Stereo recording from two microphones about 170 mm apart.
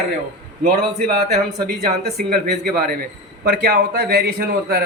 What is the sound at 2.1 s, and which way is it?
A man's voice, 60° right (ahead or behind).